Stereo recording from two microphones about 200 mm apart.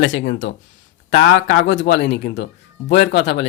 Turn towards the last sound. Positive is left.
turn(degrees=60)  # may be behind; listen again after turning